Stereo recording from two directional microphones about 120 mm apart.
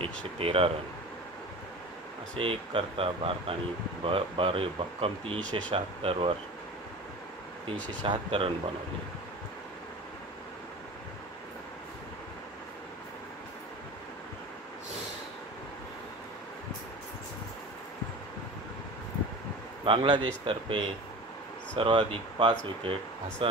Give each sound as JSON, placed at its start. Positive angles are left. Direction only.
{"t": 0.0, "sound": "speech", "side_deg": -55}
{"t": 2.3, "sound": "speech", "side_deg": -50}
{"t": 8.0, "sound": "speech", "side_deg": -45}
{"t": 19.8, "sound": "speech", "side_deg": -45}